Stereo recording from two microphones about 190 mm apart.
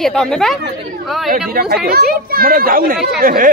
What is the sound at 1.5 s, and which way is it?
Speech, 55° right (ahead or behind).